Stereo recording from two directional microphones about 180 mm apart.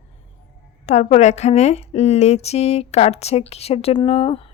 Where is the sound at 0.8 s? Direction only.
40° left (ahead or behind).